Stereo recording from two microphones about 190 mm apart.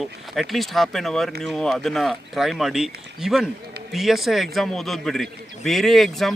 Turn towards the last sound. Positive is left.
turn(degrees=0)  # may be behind; listen again after turning